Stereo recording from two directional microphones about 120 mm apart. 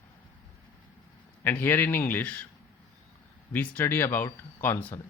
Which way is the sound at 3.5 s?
15° left (ahead or behind).